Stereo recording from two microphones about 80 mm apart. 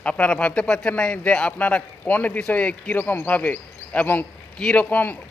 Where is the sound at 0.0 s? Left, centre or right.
Centre.